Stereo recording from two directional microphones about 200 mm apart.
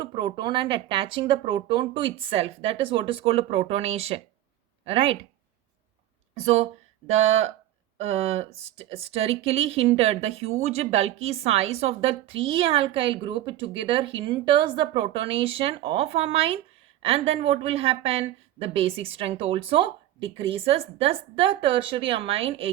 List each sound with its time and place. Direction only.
0.0 s a woman's voice: 20° right (ahead or behind)
6.4 s a woman's voice: 30° right (ahead or behind)